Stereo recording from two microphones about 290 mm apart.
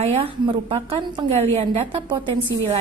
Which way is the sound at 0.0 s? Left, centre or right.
Right.